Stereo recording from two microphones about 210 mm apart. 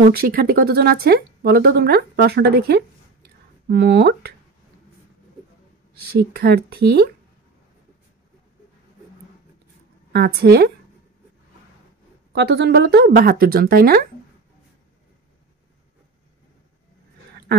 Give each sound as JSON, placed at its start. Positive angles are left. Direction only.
{"t": 0.1, "sound": "speech", "side_deg": -45}
{"t": 6.1, "sound": "speech", "side_deg": -50}
{"t": 10.1, "sound": "speech", "side_deg": -50}
{"t": 12.4, "sound": "speech", "side_deg": -50}